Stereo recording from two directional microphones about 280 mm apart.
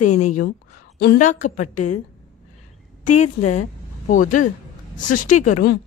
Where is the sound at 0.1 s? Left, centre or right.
Left.